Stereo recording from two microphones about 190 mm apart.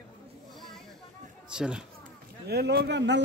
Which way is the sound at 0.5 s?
Centre (ahead or behind).